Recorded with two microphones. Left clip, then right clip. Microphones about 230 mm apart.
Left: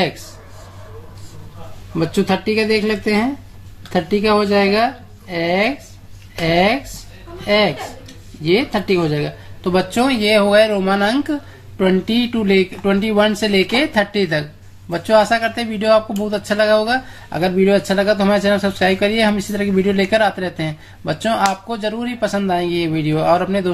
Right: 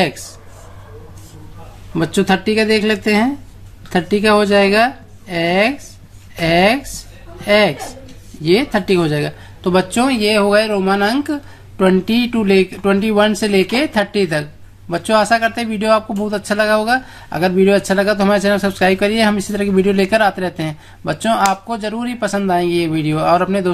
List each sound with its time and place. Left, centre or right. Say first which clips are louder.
2.0 s speech: right 2 dB; right